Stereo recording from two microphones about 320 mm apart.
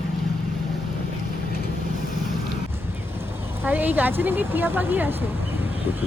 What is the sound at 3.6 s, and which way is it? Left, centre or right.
A woman's voice, centre.